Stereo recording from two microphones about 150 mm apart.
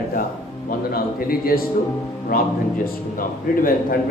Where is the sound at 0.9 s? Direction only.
75° left (ahead or behind).